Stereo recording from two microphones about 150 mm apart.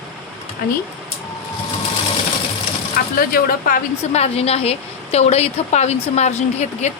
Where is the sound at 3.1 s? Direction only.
75° left (ahead or behind).